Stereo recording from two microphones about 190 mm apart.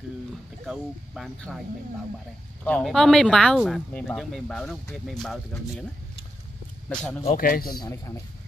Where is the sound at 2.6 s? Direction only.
5° left (ahead or behind).